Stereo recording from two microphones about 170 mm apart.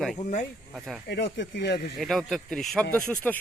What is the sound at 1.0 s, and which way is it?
Speech, 80° left.